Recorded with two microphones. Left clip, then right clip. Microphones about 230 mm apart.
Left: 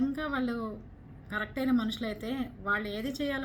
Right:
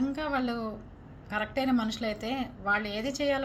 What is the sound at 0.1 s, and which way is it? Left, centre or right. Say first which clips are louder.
A woman's voice: right 2 dB; right.